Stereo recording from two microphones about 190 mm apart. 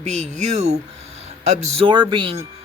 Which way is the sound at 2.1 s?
25° right (ahead or behind).